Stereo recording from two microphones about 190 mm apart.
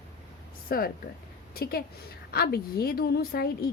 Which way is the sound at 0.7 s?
50° left (ahead or behind).